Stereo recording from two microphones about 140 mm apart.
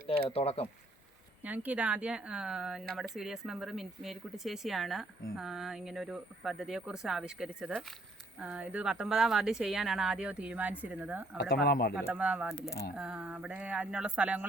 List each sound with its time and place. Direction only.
0.3 s speech: 45° left (ahead or behind)
1.4 s speech: 10° right (ahead or behind); by 7.9 s 5° left (ahead or behind)
8.4 s speech: 10° right (ahead or behind)
11.4 s speech: 90° left
11.9 s speech: 10° right (ahead or behind)